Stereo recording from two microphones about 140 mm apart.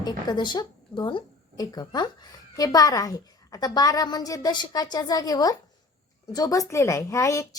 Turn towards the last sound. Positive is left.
turn(degrees=20)  # may be behind; listen again after turning